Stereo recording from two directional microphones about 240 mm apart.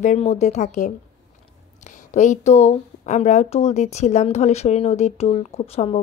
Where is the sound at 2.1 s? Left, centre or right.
Left.